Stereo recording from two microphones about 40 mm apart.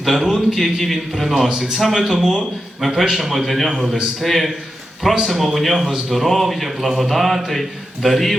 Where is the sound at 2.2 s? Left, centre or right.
Centre.